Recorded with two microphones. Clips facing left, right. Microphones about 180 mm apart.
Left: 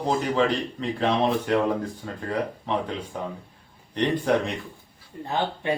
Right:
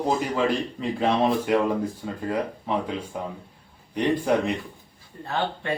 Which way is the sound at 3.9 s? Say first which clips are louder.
Even; 10° right (ahead or behind).